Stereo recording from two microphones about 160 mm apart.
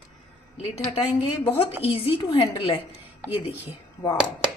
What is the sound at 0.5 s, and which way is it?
A woman's voice, 35° left (ahead or behind).